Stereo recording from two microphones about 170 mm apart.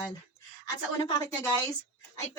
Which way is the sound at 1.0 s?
15° left (ahead or behind).